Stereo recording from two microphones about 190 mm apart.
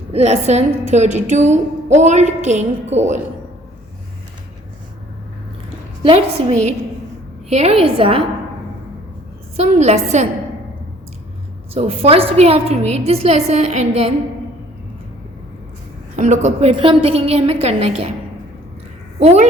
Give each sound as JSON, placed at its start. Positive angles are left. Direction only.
{"t": 0.1, "sound": "a woman's voice", "side_deg": -35}
{"t": 6.0, "sound": "a woman's voice", "side_deg": -30}
{"t": 7.5, "sound": "a woman's voice", "side_deg": -30}
{"t": 9.6, "sound": "a woman's voice", "side_deg": -35}
{"t": 11.7, "sound": "a woman's voice", "side_deg": -30}
{"t": 16.1, "sound": "a woman's voice", "side_deg": -40}
{"t": 19.2, "sound": "a woman's voice", "side_deg": -35}